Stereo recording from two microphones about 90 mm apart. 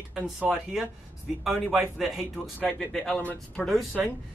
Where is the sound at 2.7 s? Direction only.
5° left (ahead or behind).